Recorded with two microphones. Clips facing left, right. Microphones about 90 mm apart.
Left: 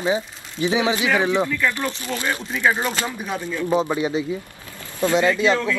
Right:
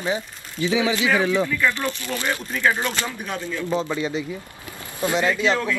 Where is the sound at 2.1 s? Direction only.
Centre (ahead or behind).